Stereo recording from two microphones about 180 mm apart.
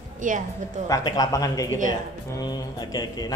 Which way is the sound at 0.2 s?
45° right (ahead or behind).